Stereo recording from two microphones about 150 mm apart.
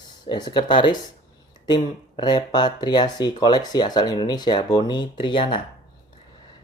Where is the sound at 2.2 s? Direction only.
30° left (ahead or behind).